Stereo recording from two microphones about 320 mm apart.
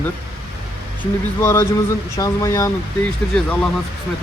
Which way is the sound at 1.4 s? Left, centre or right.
Centre.